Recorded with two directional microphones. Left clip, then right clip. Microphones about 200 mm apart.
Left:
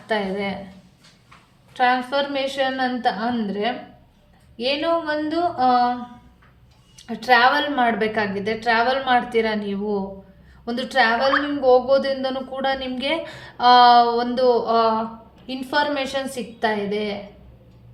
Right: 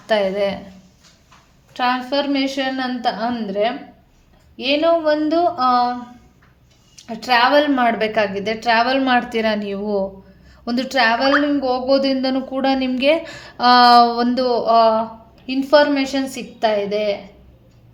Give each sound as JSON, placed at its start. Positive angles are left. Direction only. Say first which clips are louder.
{"t": 0.1, "sound": "a woman's voice", "louder": "right 6 dB", "side_deg": -40}
{"t": 1.7, "sound": "a woman's voice", "louder": "even", "side_deg": -35}
{"t": 6.9, "sound": "a woman's voice", "louder": "even", "side_deg": -30}